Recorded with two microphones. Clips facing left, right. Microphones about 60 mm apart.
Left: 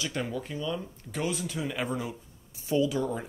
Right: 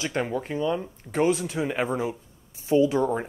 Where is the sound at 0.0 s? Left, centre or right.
Right.